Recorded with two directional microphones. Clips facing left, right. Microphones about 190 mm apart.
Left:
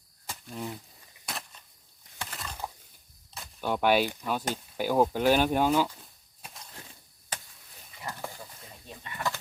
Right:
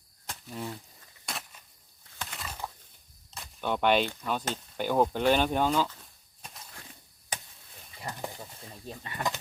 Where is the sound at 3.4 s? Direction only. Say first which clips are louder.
Even; 5° left (ahead or behind).